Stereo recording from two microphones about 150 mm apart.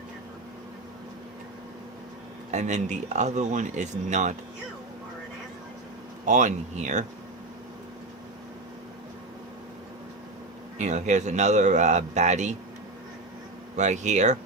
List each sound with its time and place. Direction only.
2.5 s speech: 50° right (ahead or behind)
6.2 s speech: 55° right (ahead or behind)
10.8 s speech: 50° right (ahead or behind)
13.7 s speech: 50° right (ahead or behind)